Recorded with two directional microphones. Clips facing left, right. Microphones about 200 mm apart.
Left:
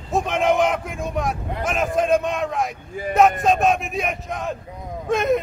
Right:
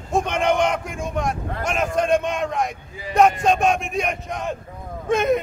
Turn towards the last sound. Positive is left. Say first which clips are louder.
# right 1 dB
turn(degrees=0)  # may be behind; listen again after turning